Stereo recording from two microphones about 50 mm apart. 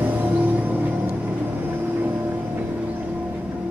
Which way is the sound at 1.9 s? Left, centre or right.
Right.